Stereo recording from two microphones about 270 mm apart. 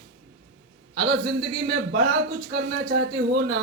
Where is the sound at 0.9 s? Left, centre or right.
Right.